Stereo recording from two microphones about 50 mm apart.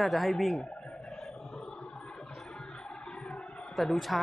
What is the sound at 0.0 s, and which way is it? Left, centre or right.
Speech, centre.